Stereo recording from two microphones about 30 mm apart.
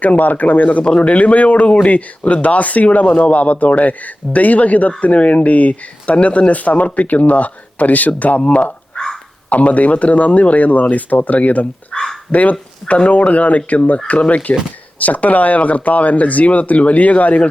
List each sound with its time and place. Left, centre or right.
0.0 s speech: left
0.9 s speech: left
1.1 s speech: left
8.4 s speech: left
11.9 s speech: left
12.3 s speech: left